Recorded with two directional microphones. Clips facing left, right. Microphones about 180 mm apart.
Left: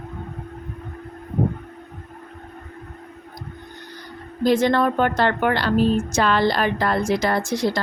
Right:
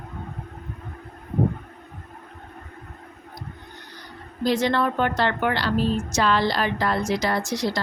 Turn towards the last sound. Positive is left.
turn(degrees=55)  # may be behind; listen again after turning